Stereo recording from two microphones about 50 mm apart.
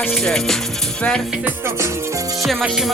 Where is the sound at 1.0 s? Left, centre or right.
Left.